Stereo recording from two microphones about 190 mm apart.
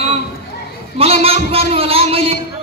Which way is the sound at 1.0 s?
30° right (ahead or behind).